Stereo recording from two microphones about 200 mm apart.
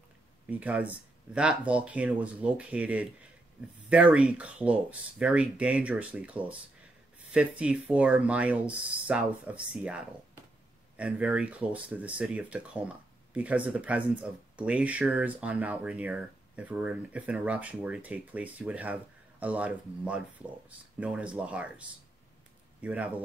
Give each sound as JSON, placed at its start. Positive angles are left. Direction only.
{"t": 0.5, "sound": "speech", "side_deg": -5}